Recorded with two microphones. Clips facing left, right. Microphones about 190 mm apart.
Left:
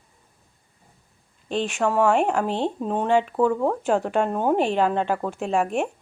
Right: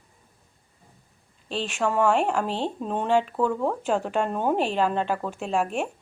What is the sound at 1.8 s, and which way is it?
Speech, 5° left (ahead or behind).